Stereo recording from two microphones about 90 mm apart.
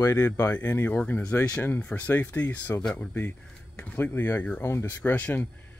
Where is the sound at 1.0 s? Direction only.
15° left (ahead or behind); by 5.0 s 30° left (ahead or behind).